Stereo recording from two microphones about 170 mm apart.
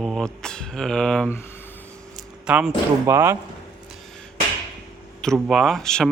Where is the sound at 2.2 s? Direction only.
5° right (ahead or behind).